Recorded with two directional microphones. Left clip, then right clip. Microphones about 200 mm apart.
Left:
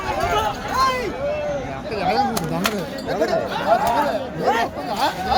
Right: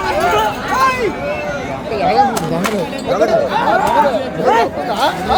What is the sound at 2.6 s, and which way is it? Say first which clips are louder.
Chatter: right 6 dB; 30° left (ahead or behind).